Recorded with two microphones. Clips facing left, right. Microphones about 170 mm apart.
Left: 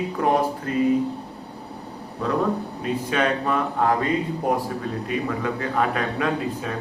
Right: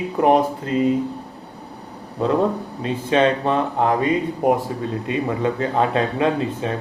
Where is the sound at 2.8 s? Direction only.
25° right (ahead or behind).